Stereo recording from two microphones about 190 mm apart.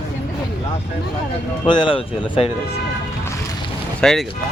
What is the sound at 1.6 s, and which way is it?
Music, 25° left (ahead or behind).